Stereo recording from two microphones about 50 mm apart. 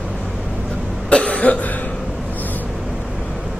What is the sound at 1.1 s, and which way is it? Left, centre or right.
Cough, left.